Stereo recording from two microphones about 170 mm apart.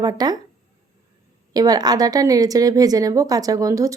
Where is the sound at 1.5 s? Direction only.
20° right (ahead or behind).